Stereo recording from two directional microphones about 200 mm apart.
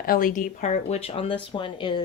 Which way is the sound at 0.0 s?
45° left (ahead or behind).